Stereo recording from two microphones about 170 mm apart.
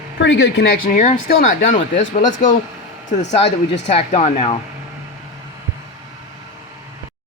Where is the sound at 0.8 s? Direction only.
50° left (ahead or behind).